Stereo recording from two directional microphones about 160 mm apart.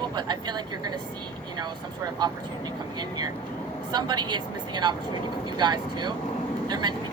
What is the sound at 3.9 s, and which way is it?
Speech, 25° right (ahead or behind).